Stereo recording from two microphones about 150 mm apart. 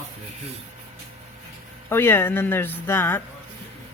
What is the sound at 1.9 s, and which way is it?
Speech, 15° left (ahead or behind).